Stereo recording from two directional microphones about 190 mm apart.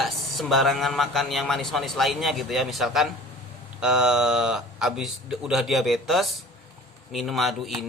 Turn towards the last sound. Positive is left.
turn(degrees=0)  # may be behind; listen again after turning